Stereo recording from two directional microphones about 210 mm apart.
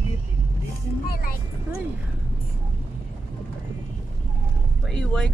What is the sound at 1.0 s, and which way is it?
Speech, 45° left (ahead or behind).